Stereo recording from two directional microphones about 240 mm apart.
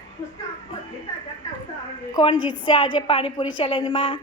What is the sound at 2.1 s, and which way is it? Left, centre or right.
A woman's voice, left.